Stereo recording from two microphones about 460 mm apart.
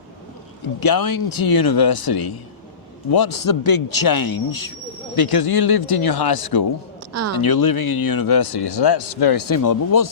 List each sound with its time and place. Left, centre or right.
0.8 s speech: left
7.1 s a sound: right
7.3 s speech: left